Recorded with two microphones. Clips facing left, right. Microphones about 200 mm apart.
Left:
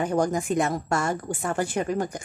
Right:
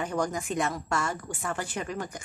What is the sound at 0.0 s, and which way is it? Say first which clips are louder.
A woman's voice: left 6 dB; 40° left (ahead or behind).